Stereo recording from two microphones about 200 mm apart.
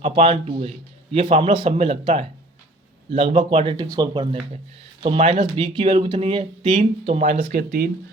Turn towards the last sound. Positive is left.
turn(degrees=-50)  # may be behind; listen again after turning